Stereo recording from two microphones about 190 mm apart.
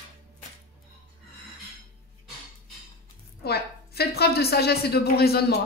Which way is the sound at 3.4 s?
55° left (ahead or behind).